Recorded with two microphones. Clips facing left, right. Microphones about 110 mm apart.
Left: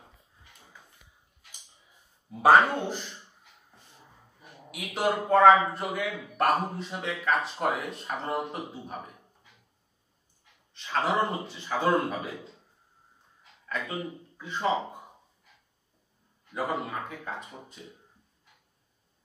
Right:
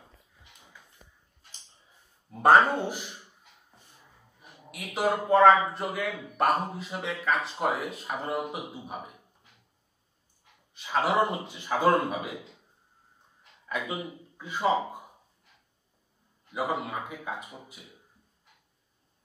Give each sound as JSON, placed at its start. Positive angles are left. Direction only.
{"t": 0.4, "sound": "music", "side_deg": -20}
{"t": 1.5, "sound": "a sound", "side_deg": 15}
{"t": 2.3, "sound": "speech", "side_deg": 0}
{"t": 4.6, "sound": "a man's voice", "side_deg": 0}
{"t": 10.7, "sound": "speech", "side_deg": -10}
{"t": 13.7, "sound": "speech", "side_deg": -10}
{"t": 16.5, "sound": "speech", "side_deg": -5}